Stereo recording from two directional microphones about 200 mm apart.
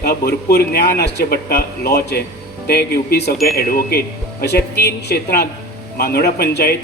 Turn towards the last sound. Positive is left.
turn(degrees=55)  # may be behind; listen again after turning